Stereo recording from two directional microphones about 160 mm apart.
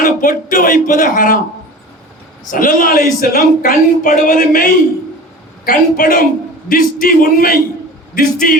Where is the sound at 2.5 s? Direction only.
60° left (ahead or behind).